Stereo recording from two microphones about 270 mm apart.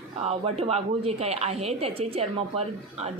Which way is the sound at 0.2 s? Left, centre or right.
Right.